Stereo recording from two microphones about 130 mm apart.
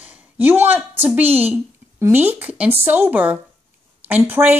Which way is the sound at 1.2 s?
50° right (ahead or behind).